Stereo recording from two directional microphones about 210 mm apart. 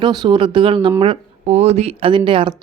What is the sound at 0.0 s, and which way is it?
Speech, 20° right (ahead or behind).